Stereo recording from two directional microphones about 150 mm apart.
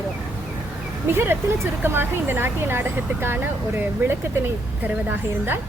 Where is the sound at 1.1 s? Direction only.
15° right (ahead or behind).